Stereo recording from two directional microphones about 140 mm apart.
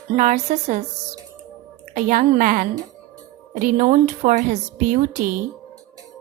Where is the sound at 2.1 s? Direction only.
70° right (ahead or behind).